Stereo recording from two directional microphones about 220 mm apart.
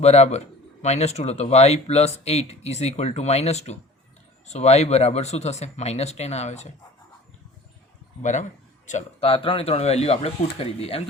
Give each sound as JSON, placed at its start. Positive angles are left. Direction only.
{"t": 0.0, "sound": "a man's voice", "side_deg": 30}
{"t": 8.2, "sound": "a man's voice", "side_deg": 30}